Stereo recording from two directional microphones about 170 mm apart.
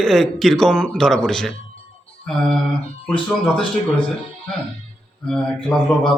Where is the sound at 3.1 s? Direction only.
30° left (ahead or behind).